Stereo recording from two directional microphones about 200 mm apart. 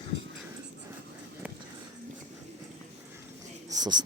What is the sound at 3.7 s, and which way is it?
Wheeze, 20° right (ahead or behind).